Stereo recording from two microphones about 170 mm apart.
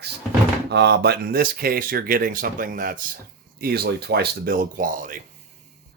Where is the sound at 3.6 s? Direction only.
65° right (ahead or behind).